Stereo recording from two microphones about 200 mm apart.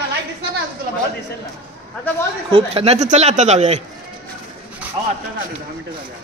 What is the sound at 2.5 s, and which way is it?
Speech, 30° right (ahead or behind).